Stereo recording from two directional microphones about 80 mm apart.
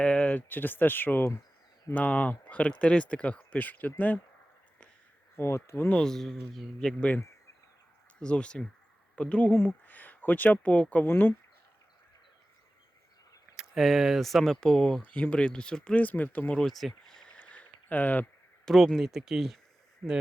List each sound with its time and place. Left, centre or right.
0.0 s speech: centre
5.4 s speech: left
5.9 s speech: centre
8.2 s speech: centre
13.6 s speech: centre
16.6 s a sound: centre; by 18.3 s left
18.6 s speech: centre
20.0 s speech: centre